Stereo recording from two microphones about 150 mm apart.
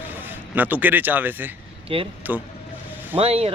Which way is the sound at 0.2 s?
10° right (ahead or behind).